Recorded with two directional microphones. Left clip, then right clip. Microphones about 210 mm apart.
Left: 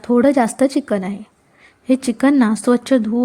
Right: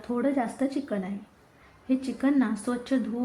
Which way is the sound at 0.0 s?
45° left (ahead or behind).